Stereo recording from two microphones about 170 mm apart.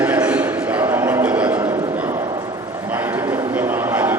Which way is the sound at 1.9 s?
10° right (ahead or behind).